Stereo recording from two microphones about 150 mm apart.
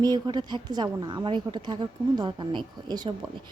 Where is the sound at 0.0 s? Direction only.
25° right (ahead or behind).